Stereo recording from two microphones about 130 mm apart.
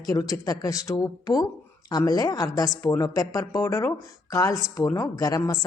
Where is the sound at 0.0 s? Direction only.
25° left (ahead or behind).